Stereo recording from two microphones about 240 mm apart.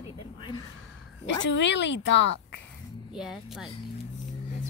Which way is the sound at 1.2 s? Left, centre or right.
Left.